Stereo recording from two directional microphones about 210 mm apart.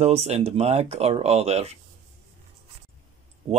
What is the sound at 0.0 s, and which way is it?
Speech, 30° right (ahead or behind).